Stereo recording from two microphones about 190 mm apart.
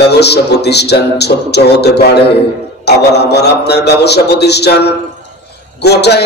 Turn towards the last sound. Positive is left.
turn(degrees=60)  # may be behind; listen again after turning